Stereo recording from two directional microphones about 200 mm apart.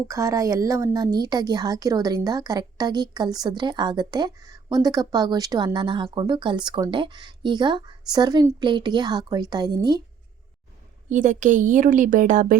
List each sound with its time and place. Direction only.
0.1 s a woman's voice: 15° right (ahead or behind)
11.1 s a woman's voice: 40° right (ahead or behind)